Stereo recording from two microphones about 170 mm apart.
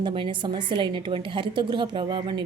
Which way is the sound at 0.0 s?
30° right (ahead or behind).